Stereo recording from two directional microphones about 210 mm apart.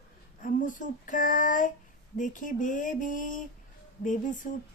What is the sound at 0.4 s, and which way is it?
Female singing, 40° left (ahead or behind).